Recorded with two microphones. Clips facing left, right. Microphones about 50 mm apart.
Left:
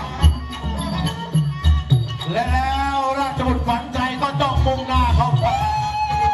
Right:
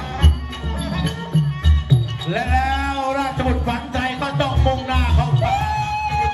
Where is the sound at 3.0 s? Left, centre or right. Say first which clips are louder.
Even; right.